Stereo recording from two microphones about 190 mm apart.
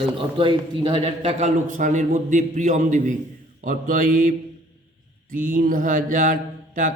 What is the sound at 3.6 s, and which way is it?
Mantra, 45° right (ahead or behind).